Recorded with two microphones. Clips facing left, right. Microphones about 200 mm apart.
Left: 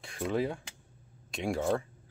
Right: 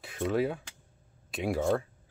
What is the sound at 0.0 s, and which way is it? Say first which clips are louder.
Speech: right 2 dB; 5° right (ahead or behind).